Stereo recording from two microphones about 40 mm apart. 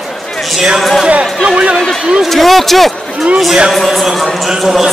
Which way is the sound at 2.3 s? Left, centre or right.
Centre.